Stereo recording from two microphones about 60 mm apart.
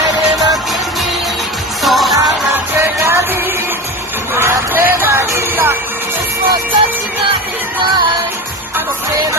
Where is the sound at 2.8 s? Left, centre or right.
Right.